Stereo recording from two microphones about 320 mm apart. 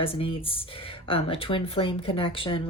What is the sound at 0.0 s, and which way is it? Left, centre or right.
Speech, centre.